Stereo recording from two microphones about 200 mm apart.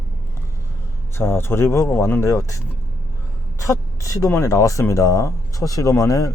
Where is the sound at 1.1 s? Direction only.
10° left (ahead or behind).